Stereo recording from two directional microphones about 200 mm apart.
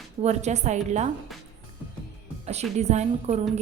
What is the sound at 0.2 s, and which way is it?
Speech, 35° right (ahead or behind).